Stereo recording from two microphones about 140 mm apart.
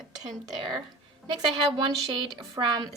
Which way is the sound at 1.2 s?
35° right (ahead or behind).